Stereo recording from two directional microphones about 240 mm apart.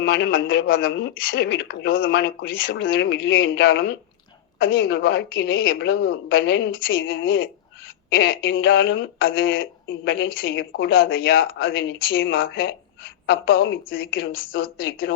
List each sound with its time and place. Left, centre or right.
0.0 s speech: left
8.1 s speech: left